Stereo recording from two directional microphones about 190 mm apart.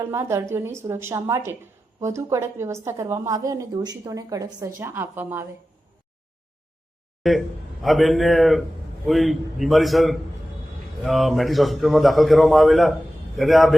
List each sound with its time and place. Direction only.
0.0 s a woman's voice: 15° right (ahead or behind)
7.2 s a man's voice: centre (ahead or behind)